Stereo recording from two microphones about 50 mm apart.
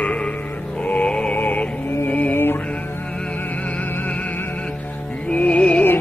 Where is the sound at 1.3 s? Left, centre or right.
Left.